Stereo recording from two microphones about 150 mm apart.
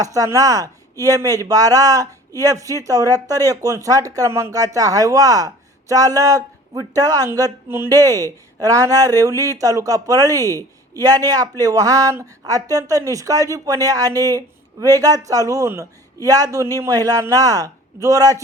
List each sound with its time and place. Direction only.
0.0 s speech: 20° right (ahead or behind)